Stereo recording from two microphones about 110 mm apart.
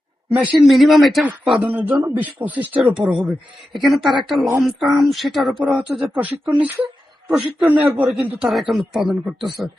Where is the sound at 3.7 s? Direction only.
Centre (ahead or behind).